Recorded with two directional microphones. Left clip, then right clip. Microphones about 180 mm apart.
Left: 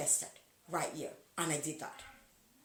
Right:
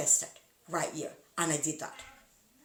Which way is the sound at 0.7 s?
15° right (ahead or behind).